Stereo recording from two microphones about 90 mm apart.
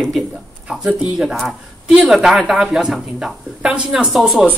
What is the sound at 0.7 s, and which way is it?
Speech, 10° right (ahead or behind).